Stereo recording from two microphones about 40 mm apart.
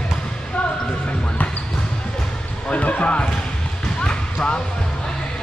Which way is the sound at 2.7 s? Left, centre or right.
Left.